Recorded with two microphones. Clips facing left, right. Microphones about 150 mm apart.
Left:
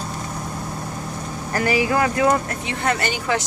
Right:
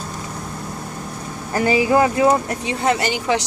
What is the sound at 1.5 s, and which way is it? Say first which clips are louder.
A woman's voice: right 3 dB; 20° right (ahead or behind).